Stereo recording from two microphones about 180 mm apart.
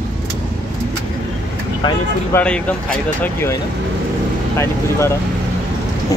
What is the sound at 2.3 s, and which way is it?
Speech, 10° left (ahead or behind).